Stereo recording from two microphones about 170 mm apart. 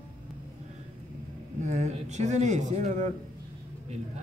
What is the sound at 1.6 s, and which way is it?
Speech, 45° right (ahead or behind).